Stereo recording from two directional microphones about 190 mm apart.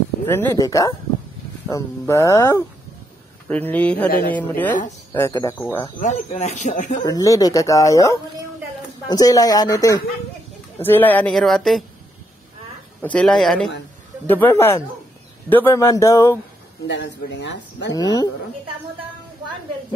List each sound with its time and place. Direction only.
0.3 s speech: 10° left (ahead or behind)
5.9 s speech: 35° left (ahead or behind)
7.1 s speech: 20° left (ahead or behind); by 11.8 s centre (ahead or behind)
13.0 s speech: 5° left (ahead or behind)
16.8 s speech: 70° left (ahead or behind)
17.9 s speech: 20° left (ahead or behind)